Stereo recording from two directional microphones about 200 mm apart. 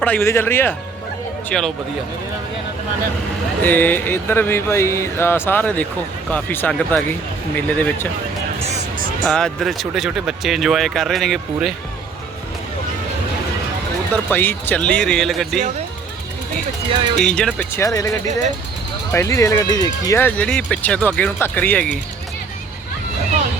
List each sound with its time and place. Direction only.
0.0 s speech: 10° left (ahead or behind)
3.6 s speech: 10° left (ahead or behind)
9.2 s speech: centre (ahead or behind)
14.1 s speech: 10° left (ahead or behind)
17.2 s speech: 5° left (ahead or behind)